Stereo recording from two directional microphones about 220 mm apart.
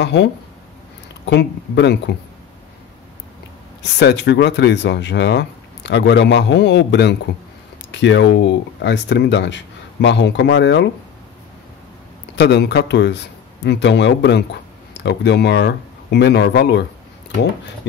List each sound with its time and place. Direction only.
0.0 s speech: 50° left (ahead or behind)
3.8 s speech: 50° left (ahead or behind)
12.4 s speech: 50° left (ahead or behind)